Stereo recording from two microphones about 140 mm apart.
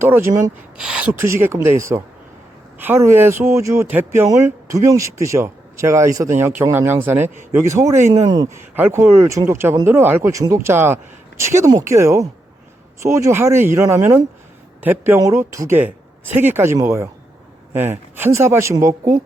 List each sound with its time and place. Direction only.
0.0 s speech: 15° right (ahead or behind)
0.8 s speech: 5° right (ahead or behind)
1.1 s speech: 20° right (ahead or behind)
8.5 s speech: 15° right (ahead or behind)